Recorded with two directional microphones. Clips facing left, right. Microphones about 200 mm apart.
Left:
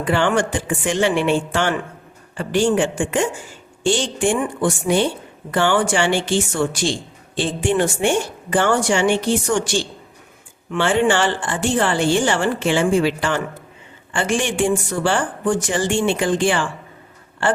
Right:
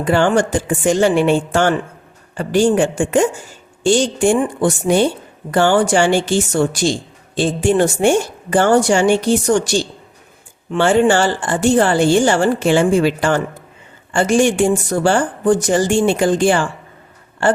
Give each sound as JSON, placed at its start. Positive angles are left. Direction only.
{"t": 0.0, "sound": "a woman's voice", "side_deg": -40}